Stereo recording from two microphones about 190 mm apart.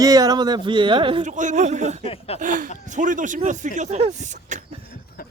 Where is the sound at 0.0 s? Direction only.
20° right (ahead or behind).